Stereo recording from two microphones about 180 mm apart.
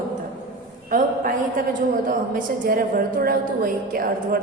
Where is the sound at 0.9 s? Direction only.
50° right (ahead or behind).